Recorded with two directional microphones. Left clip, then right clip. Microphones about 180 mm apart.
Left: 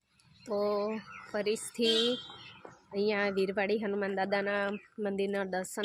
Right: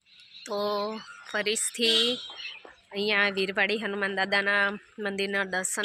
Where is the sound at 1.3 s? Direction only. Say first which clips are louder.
Right 4 dB; 5° left (ahead or behind).